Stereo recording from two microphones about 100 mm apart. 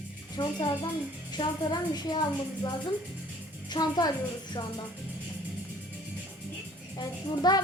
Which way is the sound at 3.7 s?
45° left (ahead or behind).